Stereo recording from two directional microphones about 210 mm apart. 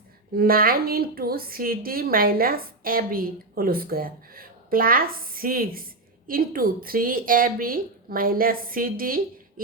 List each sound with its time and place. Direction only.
0.3 s a woman's voice: 45° right (ahead or behind)